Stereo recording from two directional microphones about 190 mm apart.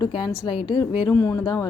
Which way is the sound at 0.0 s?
25° left (ahead or behind).